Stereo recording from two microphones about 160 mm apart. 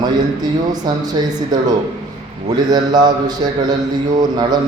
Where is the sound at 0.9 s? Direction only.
25° right (ahead or behind).